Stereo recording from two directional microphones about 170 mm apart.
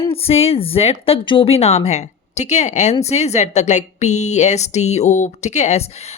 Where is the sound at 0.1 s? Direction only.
35° left (ahead or behind).